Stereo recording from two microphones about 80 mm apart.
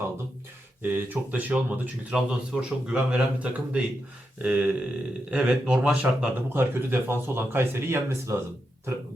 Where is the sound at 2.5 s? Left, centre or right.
Centre.